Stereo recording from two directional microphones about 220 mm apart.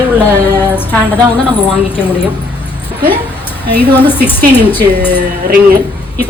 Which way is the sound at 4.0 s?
10° left (ahead or behind).